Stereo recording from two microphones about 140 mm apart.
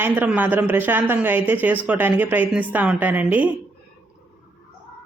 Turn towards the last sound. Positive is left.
turn(degrees=-10)  # may be behind; listen again after turning